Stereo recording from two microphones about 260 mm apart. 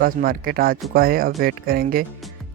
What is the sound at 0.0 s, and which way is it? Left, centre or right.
Speech, right.